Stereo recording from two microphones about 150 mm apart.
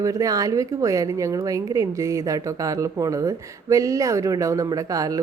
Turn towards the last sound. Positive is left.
turn(degrees=-25)  # may be behind; listen again after turning